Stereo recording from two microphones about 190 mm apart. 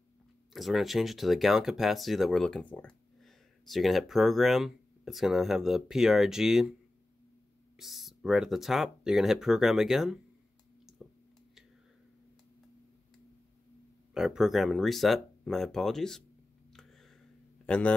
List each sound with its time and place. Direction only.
0.5 s speech: centre (ahead or behind)
7.7 s speech: centre (ahead or behind)
10.9 s a sound: 5° right (ahead or behind)
14.1 s speech: 5° right (ahead or behind)
16.7 s a sound: centre (ahead or behind)
17.6 s a man's voice: 5° left (ahead or behind)